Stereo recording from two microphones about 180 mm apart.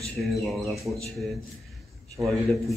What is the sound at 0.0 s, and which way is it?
A man's voice, centre (ahead or behind).